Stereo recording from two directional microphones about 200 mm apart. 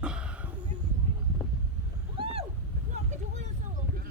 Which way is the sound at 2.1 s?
25° right (ahead or behind).